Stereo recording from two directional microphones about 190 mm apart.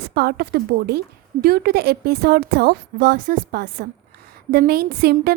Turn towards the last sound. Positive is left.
turn(degrees=-55)  # may be behind; listen again after turning